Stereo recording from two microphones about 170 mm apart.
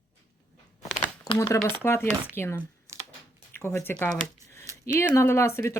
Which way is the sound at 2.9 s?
15° right (ahead or behind).